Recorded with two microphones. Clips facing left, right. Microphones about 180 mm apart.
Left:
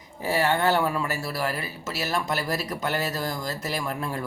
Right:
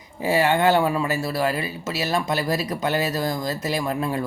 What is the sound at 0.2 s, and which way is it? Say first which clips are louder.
Speech: right 4 dB; 20° right (ahead or behind).